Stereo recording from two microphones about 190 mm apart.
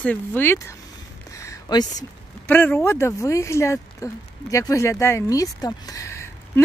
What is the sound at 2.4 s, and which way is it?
A woman's voice, 10° left (ahead or behind).